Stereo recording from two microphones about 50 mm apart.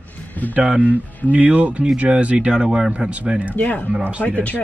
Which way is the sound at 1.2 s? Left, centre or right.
Right.